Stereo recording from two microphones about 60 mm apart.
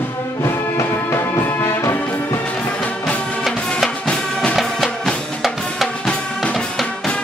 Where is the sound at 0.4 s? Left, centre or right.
Left.